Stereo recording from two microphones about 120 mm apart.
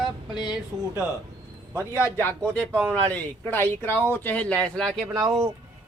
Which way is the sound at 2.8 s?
15° left (ahead or behind).